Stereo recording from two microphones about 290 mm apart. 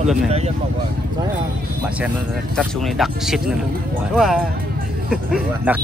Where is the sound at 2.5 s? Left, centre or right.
Centre.